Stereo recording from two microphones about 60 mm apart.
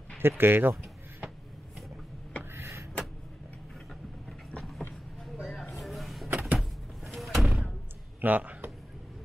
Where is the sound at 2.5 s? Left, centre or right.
Right.